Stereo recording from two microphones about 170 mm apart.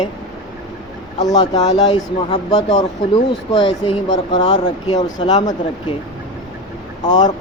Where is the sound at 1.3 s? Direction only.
25° left (ahead or behind).